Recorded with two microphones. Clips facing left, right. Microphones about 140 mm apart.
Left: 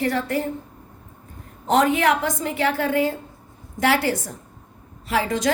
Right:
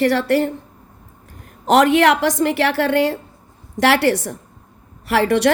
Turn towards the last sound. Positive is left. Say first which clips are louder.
# right 7 dB
turn(degrees=-70)  # may be behind; listen again after turning